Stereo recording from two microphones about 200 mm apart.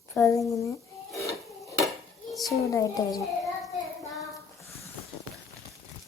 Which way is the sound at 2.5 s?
15° left (ahead or behind).